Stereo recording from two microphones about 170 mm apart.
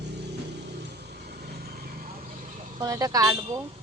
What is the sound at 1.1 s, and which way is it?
Vehicle, 70° right (ahead or behind).